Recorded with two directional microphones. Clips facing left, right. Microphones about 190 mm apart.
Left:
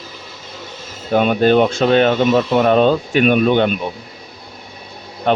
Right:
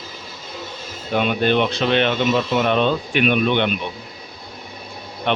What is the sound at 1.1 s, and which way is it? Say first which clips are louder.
Speech: left 6 dB; 40° left (ahead or behind).